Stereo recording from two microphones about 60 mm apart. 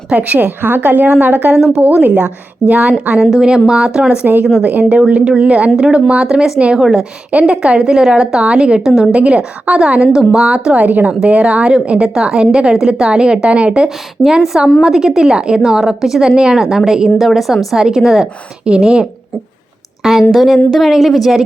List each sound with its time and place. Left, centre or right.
0.1 s a woman's voice: right
1.5 s a woman's voice: centre
2.0 s a woman's voice: right
3.2 s a woman's voice: centre
10.8 s a woman's voice: right
14.3 s a woman's voice: centre
20.0 s a woman's voice: centre